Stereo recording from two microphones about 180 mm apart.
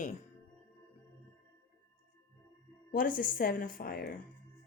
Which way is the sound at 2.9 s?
50° left (ahead or behind).